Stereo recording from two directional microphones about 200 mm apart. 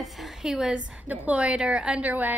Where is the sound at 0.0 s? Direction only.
Centre (ahead or behind).